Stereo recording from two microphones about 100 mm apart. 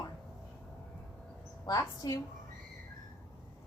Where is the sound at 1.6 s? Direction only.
40° left (ahead or behind).